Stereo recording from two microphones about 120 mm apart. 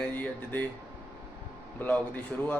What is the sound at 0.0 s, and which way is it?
Speech, 15° left (ahead or behind).